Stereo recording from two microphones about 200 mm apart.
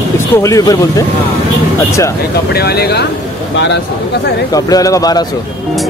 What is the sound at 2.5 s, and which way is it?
Speech, 55° left (ahead or behind).